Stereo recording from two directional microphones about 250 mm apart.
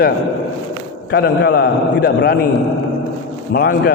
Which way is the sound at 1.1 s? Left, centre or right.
Left.